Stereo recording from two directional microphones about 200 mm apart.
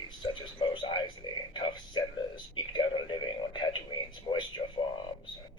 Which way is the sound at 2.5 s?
25° left (ahead or behind).